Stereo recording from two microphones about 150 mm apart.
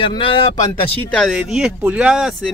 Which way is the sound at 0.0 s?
35° left (ahead or behind).